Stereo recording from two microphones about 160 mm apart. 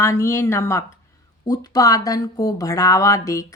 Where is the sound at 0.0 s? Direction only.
15° left (ahead or behind).